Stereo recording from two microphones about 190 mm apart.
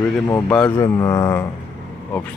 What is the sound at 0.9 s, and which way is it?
Speech, 20° left (ahead or behind).